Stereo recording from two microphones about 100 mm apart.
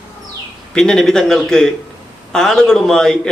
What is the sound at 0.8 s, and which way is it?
A man's voice, 5° left (ahead or behind).